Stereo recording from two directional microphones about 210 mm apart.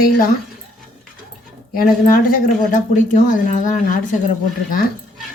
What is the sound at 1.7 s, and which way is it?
Speech, 45° left (ahead or behind).